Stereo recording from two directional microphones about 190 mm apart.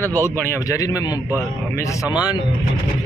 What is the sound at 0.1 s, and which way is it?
A man's voice, 15° left (ahead or behind).